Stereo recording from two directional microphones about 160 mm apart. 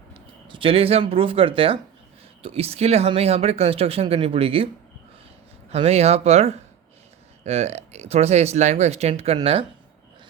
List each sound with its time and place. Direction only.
0.1 s speech: 30° right (ahead or behind)
5.7 s speech: 40° right (ahead or behind)